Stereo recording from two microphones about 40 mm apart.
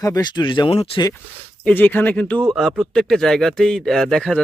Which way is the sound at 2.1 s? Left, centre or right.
Left.